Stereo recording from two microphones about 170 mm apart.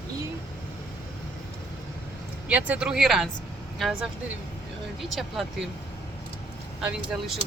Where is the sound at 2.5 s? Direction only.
5° right (ahead or behind).